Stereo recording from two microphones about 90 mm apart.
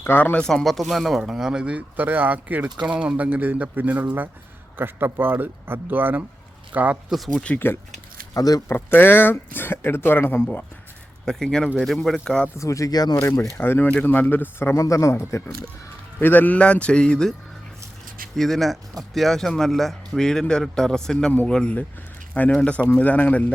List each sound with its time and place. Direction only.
0.0 s speech: 25° left (ahead or behind)
0.3 s speech: 5° left (ahead or behind); by 7.0 s 15° right (ahead or behind)
7.3 s a man's voice: 15° left (ahead or behind)
8.3 s speech: 40° left (ahead or behind)
8.6 s speech: 25° left (ahead or behind)
11.3 s a man's voice: 5° left (ahead or behind)
12.5 s speech: 35° left (ahead or behind)
13.1 s speech: 35° left (ahead or behind)
13.6 s speech: 20° left (ahead or behind)
16.2 s a man's voice: 20° left (ahead or behind)
18.3 s a man's voice: centre (ahead or behind)